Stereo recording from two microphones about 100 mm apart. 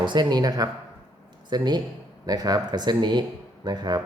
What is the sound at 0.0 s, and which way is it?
A man's voice, 50° right (ahead or behind).